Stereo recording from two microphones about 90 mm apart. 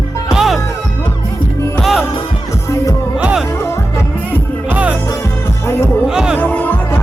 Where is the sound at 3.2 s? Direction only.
10° right (ahead or behind).